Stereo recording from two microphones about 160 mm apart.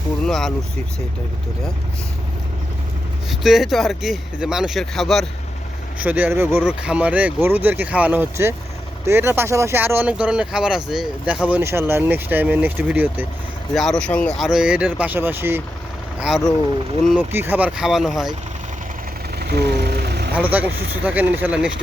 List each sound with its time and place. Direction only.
0.3 s speech: 5° left (ahead or behind)
3.2 s speech: centre (ahead or behind)
6.0 s speech: 10° right (ahead or behind)
13.7 s speech: 5° left (ahead or behind); by 15.6 s 15° right (ahead or behind)
16.2 s speech: centre (ahead or behind)
17.2 s speech: 10° right (ahead or behind)
19.4 s vehicle: 85° right
20.3 s speech: 10° right (ahead or behind)